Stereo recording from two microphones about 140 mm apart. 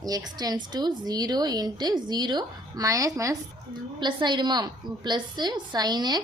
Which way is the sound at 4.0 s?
35° right (ahead or behind).